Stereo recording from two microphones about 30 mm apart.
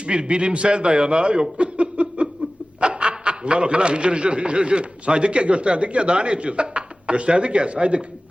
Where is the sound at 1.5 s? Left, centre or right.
Right.